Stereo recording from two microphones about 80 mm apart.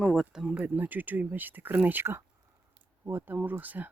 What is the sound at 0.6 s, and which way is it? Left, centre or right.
Speech, right.